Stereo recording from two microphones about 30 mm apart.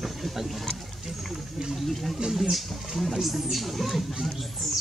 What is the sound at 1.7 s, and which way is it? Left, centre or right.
Speech, centre.